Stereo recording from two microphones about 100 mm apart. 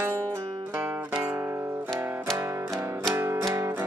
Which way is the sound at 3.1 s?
25° right (ahead or behind).